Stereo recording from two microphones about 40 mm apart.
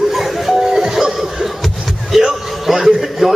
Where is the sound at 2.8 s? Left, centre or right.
Centre.